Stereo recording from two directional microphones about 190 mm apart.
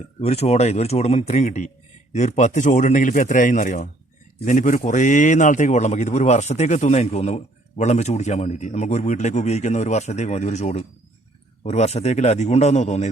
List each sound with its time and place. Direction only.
0.2 s speech: 35° left (ahead or behind)